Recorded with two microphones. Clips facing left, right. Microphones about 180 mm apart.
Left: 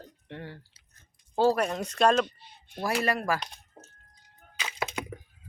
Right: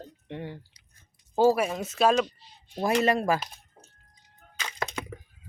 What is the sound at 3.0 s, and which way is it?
Speech, 20° right (ahead or behind).